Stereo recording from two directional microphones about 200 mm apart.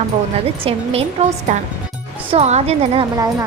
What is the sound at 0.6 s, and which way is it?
Speech, 30° right (ahead or behind).